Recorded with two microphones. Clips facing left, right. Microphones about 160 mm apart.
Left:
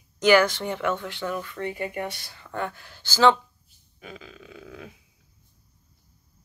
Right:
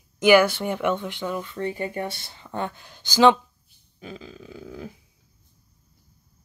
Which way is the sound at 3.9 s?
30° right (ahead or behind).